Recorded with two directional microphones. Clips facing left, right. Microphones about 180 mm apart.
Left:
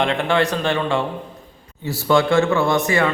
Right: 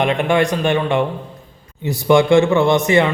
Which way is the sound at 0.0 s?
15° right (ahead or behind).